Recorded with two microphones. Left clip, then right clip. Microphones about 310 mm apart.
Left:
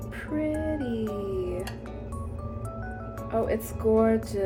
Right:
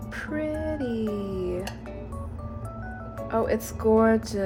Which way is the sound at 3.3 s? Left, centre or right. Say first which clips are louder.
Right 2 dB; right.